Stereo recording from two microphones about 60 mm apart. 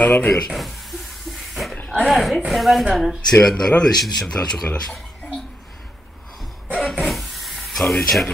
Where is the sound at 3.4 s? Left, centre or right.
Centre.